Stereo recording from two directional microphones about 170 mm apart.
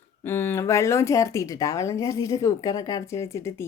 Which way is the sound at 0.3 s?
15° left (ahead or behind).